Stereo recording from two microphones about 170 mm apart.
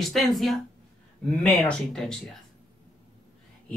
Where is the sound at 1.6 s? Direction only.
5° left (ahead or behind).